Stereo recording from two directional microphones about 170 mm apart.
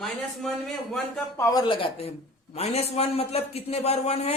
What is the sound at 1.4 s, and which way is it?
A man's voice, 20° left (ahead or behind).